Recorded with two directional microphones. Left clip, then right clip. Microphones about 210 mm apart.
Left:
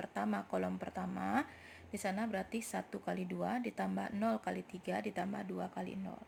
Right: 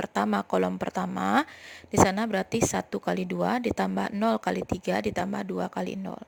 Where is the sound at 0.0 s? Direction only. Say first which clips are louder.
Right 12 dB; 45° right (ahead or behind).